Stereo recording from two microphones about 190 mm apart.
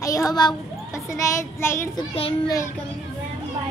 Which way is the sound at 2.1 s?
30° left (ahead or behind).